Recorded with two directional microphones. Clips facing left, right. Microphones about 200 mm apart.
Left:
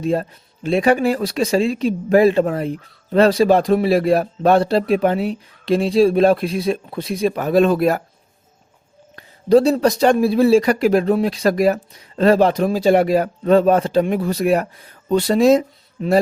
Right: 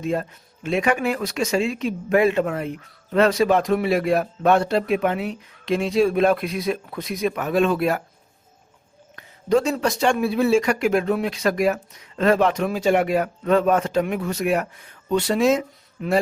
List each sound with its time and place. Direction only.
0.0 s speech: 35° left (ahead or behind)
9.1 s speech: 35° left (ahead or behind)